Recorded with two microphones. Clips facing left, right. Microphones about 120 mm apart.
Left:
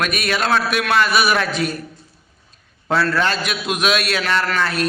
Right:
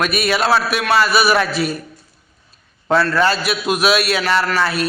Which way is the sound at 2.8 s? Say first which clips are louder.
Right 3 dB; centre (ahead or behind).